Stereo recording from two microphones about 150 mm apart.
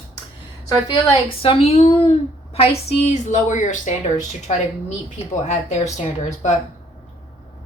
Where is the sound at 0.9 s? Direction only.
35° left (ahead or behind); by 6.6 s 50° left (ahead or behind).